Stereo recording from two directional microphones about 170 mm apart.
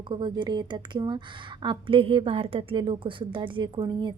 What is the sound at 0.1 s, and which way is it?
A woman's voice, 25° right (ahead or behind).